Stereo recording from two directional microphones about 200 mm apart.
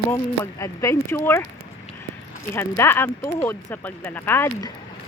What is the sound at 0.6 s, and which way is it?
Speech, 15° left (ahead or behind).